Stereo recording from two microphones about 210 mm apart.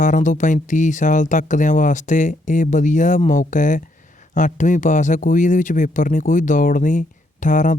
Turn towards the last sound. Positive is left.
turn(degrees=35)  # may be behind; listen again after turning